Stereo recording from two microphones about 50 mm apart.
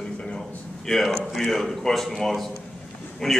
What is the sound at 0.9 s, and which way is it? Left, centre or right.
A man's voice, centre.